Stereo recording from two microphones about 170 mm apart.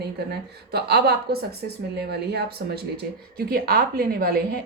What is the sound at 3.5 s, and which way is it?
A woman's voice, 65° right (ahead or behind).